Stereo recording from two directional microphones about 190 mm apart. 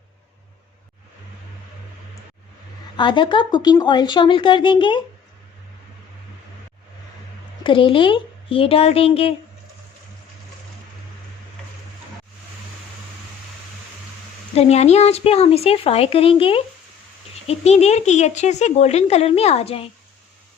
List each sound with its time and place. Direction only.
3.0 s speech: 25° left (ahead or behind)
7.6 s a woman's voice: 25° left (ahead or behind)
14.5 s speech: 35° left (ahead or behind)